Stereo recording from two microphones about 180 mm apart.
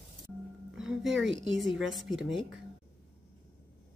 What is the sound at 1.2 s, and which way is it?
Speech, 90° right.